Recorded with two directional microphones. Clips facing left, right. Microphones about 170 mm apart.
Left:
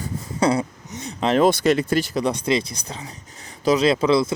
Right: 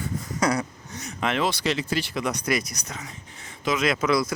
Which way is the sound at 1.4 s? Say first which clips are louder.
Left 11 dB; 50° left (ahead or behind).